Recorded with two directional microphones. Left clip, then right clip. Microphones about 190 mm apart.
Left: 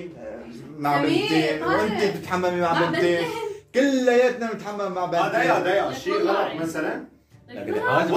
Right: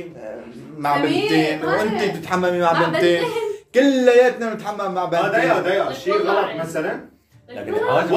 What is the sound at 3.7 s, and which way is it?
Speech, 35° right (ahead or behind).